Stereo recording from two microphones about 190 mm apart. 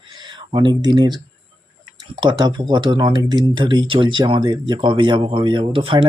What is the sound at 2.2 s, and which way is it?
Speech, 25° right (ahead or behind).